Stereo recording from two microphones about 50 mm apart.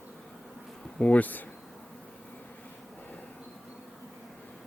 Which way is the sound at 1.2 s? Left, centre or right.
Left.